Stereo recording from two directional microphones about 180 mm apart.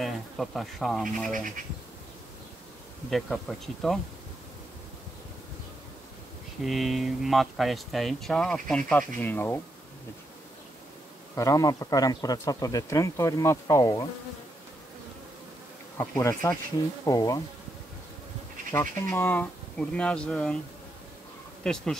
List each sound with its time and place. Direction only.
0.0 s speech: centre (ahead or behind)
3.1 s speech: centre (ahead or behind)
6.6 s speech: centre (ahead or behind)
11.3 s speech: 20° left (ahead or behind)
16.0 s speech: 15° left (ahead or behind)
18.7 s speech: 15° left (ahead or behind)
21.6 s speech: 5° left (ahead or behind)